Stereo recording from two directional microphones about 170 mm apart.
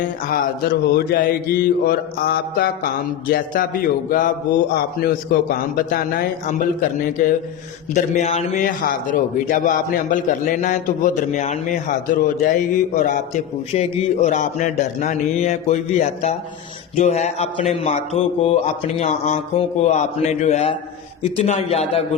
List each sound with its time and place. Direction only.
0.3 s a man's voice: 65° left (ahead or behind)
4.7 s a man's voice: 60° left (ahead or behind); by 8.6 s 40° left (ahead or behind)
8.6 s a man's voice: 50° left (ahead or behind)